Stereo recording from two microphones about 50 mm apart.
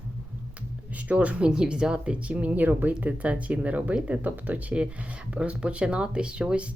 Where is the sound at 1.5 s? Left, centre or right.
Centre; by 4.6 s right.